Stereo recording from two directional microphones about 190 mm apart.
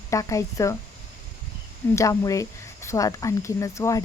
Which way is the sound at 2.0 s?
15° left (ahead or behind).